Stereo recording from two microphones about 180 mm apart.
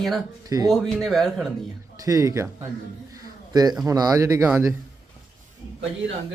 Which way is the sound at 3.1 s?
20° right (ahead or behind).